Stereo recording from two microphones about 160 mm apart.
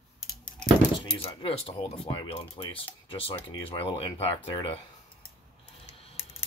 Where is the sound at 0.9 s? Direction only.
35° left (ahead or behind).